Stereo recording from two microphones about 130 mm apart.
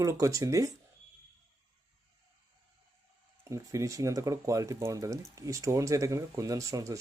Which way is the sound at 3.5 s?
25° right (ahead or behind).